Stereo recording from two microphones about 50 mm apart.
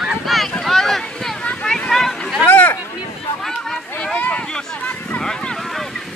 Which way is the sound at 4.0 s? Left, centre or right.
Left.